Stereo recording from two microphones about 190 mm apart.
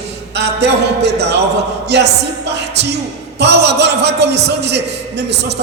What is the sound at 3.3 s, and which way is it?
A man's voice, 65° right (ahead or behind).